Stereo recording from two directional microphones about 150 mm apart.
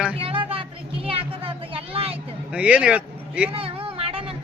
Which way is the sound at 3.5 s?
40° right (ahead or behind).